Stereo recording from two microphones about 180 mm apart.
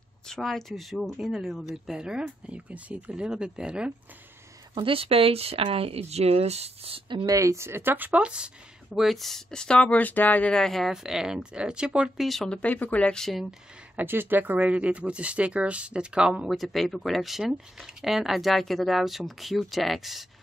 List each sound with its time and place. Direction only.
0.3 s speech: centre (ahead or behind)
4.7 s speech: 30° right (ahead or behind); by 20.2 s centre (ahead or behind)